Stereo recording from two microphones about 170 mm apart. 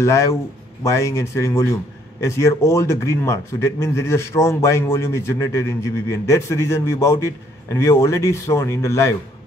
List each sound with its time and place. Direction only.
0.0 s a man's voice: 15° left (ahead or behind)